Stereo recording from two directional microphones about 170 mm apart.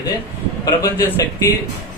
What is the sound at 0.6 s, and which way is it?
Speech, 20° left (ahead or behind).